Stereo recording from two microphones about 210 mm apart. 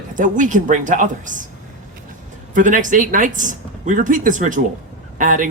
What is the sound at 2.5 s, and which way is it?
Speech, 40° right (ahead or behind).